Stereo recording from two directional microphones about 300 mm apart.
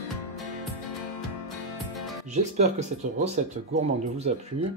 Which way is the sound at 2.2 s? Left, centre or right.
Right.